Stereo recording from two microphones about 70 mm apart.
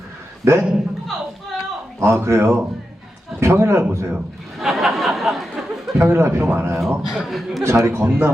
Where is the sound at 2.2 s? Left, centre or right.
Right.